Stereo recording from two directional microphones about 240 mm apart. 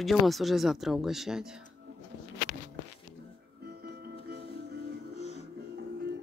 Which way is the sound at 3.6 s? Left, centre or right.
Right.